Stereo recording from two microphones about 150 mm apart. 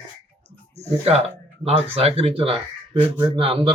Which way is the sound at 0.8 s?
45° right (ahead or behind).